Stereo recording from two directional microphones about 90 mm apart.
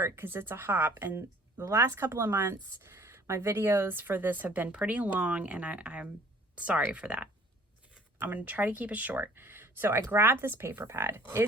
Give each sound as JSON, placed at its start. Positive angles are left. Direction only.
{"t": 0.0, "sound": "speech", "side_deg": -25}
{"t": 8.3, "sound": "speech", "side_deg": -20}